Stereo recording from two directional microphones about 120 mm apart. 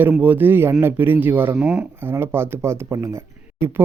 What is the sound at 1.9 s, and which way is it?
Speech, 20° right (ahead or behind).